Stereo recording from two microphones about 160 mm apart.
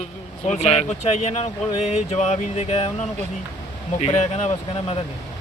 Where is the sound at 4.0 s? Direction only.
40° left (ahead or behind).